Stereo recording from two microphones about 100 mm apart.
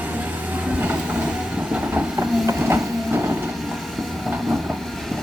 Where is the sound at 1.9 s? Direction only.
25° right (ahead or behind).